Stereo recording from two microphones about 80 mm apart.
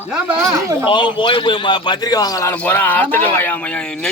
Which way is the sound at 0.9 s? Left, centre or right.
Left.